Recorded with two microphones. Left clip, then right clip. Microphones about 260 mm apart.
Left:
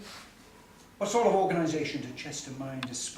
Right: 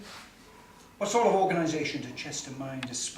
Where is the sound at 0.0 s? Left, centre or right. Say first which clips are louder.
Right 1 dB; centre.